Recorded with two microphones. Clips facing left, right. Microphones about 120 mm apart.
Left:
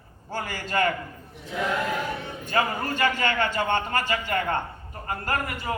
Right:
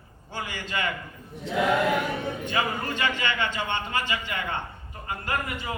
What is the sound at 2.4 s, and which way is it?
A man's voice, 45° left (ahead or behind).